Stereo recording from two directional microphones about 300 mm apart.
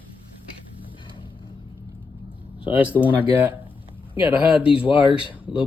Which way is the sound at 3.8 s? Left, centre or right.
Centre.